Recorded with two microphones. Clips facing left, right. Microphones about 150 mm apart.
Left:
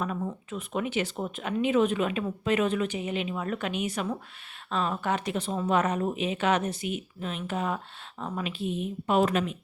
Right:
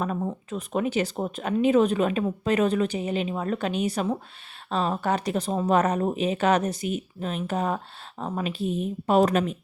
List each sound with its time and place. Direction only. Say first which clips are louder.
0.0 s speech: right 3 dB; 35° right (ahead or behind)